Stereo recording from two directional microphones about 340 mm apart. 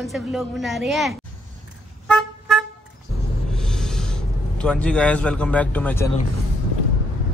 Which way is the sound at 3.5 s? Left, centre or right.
Centre.